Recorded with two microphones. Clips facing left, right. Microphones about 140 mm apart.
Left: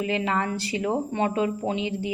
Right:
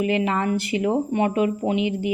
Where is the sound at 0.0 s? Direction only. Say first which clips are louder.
Right 4 dB; 20° right (ahead or behind).